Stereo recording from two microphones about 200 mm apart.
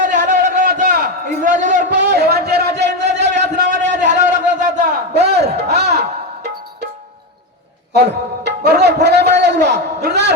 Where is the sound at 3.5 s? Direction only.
35° right (ahead or behind).